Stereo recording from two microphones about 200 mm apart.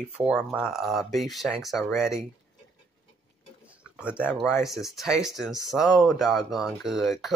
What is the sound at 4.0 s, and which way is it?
Speech, 5° right (ahead or behind).